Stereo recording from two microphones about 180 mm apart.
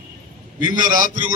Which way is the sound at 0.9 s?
45° right (ahead or behind).